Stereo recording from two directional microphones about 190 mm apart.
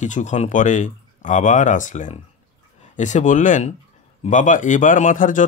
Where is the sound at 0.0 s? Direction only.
40° left (ahead or behind).